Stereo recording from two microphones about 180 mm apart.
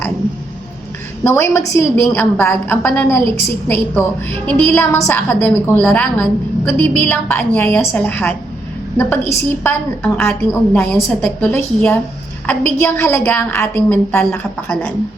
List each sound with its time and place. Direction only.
1.2 s a woman's voice: 15° left (ahead or behind)